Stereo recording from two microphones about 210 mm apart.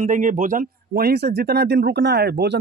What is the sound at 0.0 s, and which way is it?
Speech, 40° right (ahead or behind).